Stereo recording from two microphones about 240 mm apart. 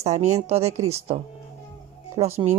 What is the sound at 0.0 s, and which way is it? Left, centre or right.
A woman's voice, right.